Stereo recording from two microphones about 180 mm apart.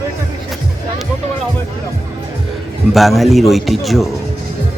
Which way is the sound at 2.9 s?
Centre (ahead or behind).